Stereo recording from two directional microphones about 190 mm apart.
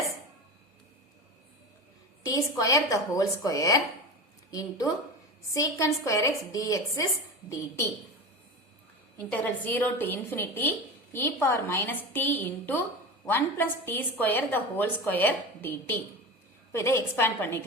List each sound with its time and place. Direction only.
2.2 s a woman's voice: 20° left (ahead or behind)
9.3 s a woman's voice: 10° left (ahead or behind)